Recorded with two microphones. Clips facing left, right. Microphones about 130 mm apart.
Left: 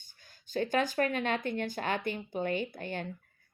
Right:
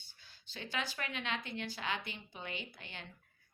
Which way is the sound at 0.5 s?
45° left (ahead or behind).